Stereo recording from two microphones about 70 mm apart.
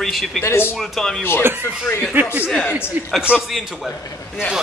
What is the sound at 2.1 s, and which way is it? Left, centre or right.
A man's voice, right.